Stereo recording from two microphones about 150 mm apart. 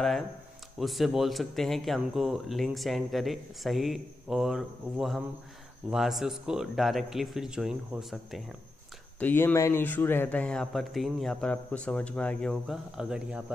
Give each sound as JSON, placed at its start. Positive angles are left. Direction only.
{"t": 0.7, "sound": "speech", "side_deg": 0}
{"t": 9.2, "sound": "speech", "side_deg": 15}